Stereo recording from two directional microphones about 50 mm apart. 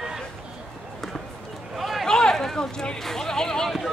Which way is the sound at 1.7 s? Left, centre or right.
Centre.